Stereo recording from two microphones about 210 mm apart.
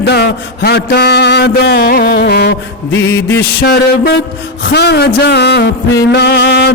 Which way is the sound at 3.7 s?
50° left (ahead or behind).